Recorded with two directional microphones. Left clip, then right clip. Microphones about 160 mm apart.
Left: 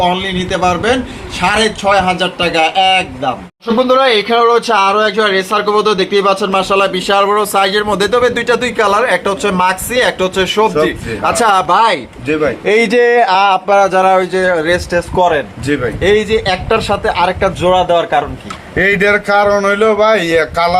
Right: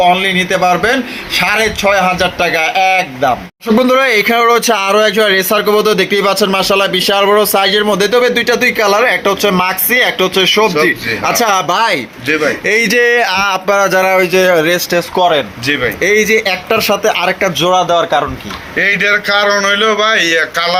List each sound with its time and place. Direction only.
0.0 s speech: 15° right (ahead or behind)
3.8 s speech: 35° right (ahead or behind)
12.6 s speech: 10° right (ahead or behind)
16.0 s speech: 20° right (ahead or behind)
17.6 s speech: centre (ahead or behind)
18.8 s speech: 60° left (ahead or behind)